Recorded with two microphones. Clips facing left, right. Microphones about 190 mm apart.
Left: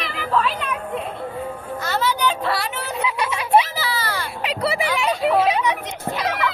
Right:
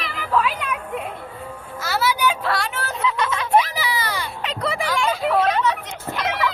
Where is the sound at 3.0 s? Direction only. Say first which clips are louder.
Right 2 dB; 15° left (ahead or behind).